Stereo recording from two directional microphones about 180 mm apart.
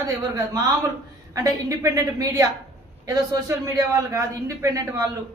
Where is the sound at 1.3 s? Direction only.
20° right (ahead or behind).